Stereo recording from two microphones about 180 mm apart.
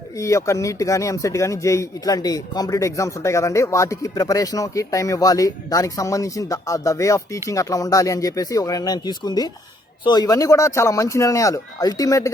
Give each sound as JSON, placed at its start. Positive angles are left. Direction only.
{"t": 0.2, "sound": "speech", "side_deg": 15}